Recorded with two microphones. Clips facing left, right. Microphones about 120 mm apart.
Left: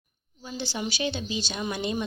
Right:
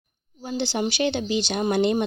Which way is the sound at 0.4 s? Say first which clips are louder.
Right 7 dB; 60° right (ahead or behind).